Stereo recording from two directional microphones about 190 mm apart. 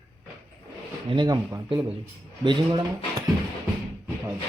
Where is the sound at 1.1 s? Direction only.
20° right (ahead or behind).